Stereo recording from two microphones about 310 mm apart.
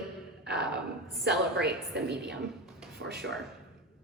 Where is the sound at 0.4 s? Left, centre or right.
Right.